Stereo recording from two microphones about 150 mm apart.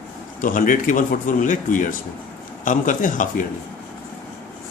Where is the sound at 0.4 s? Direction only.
65° left (ahead or behind).